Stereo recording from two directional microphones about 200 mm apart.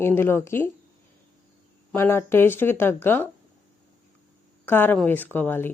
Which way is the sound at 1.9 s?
10° left (ahead or behind).